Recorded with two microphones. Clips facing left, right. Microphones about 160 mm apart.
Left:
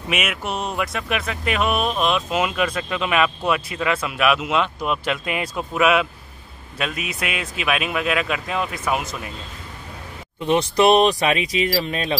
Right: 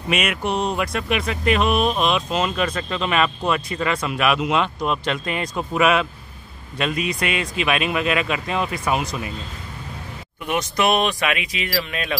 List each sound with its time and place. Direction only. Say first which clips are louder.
0.1 s speech: right 3 dB; 5° left (ahead or behind)
10.4 s speech: left 5 dB; 30° left (ahead or behind)